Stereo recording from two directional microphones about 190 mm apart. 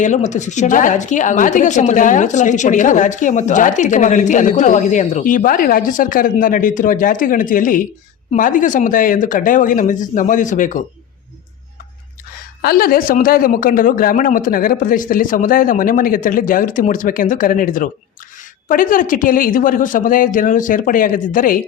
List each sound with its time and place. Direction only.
0.0 s a woman's voice: 40° left (ahead or behind)
12.6 s speech: 50° left (ahead or behind)